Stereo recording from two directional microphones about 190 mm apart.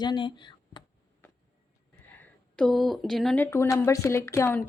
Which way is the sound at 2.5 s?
Centre (ahead or behind).